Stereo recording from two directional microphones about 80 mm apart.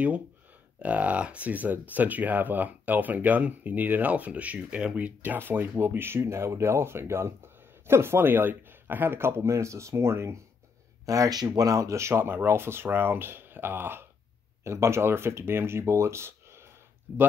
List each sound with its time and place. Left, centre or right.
0.7 s speech: centre; by 10.4 s right
11.1 s speech: right